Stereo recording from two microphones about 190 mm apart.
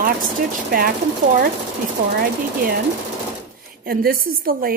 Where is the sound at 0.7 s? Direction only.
50° right (ahead or behind).